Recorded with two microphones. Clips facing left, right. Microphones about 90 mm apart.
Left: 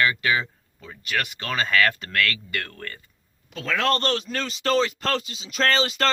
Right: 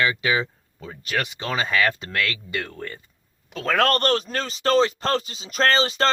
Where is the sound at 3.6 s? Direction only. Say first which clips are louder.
Right 3 dB; 50° right (ahead or behind).